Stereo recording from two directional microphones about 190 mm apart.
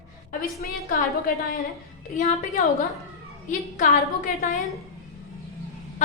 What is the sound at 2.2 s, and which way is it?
A woman's voice, 35° left (ahead or behind).